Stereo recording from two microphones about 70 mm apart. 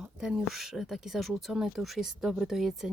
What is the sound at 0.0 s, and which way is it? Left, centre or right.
Speech, centre.